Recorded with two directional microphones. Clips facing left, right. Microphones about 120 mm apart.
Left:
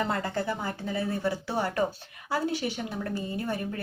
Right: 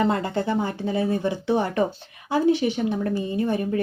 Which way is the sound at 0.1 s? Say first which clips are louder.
Right 6 dB; 25° right (ahead or behind).